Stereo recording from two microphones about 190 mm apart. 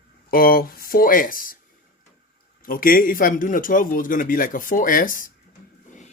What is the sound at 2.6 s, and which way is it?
A man's voice, 50° left (ahead or behind).